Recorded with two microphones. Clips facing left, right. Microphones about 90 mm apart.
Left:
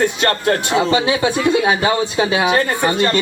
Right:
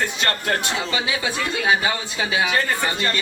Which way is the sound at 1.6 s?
35° left (ahead or behind).